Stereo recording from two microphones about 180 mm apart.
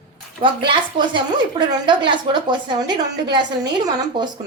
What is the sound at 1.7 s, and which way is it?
A woman's voice, 25° right (ahead or behind).